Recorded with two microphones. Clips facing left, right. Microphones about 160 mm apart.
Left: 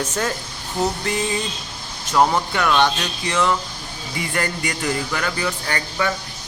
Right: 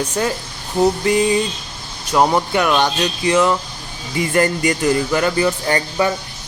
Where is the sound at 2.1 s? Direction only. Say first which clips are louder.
Right 3 dB; 20° right (ahead or behind).